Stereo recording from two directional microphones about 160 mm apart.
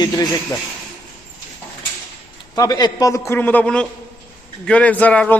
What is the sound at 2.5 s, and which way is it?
A man's voice, 25° left (ahead or behind).